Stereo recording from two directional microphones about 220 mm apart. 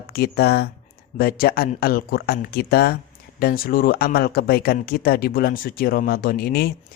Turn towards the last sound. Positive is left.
turn(degrees=45)  # may be behind; listen again after turning